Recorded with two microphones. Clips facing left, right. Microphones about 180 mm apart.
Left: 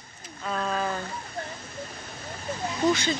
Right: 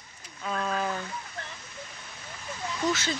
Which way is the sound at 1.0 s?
40° left (ahead or behind).